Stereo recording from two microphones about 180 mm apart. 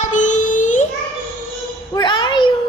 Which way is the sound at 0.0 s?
45° left (ahead or behind).